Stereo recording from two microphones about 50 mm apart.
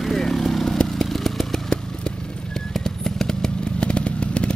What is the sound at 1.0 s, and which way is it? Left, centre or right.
Motorcycle, centre.